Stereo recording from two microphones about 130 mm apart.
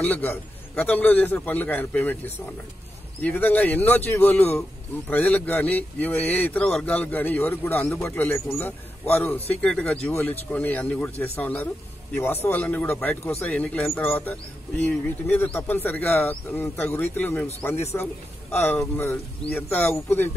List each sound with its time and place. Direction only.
0.0 s speech: 15° left (ahead or behind)
3.2 s speech: 15° left (ahead or behind)